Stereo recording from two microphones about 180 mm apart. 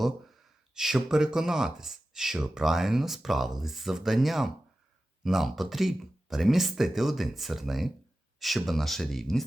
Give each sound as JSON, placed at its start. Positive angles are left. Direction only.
{"t": 0.0, "sound": "speech", "side_deg": 0}